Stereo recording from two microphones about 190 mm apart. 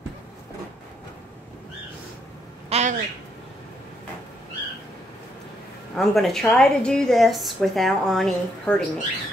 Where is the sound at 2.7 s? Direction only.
35° right (ahead or behind).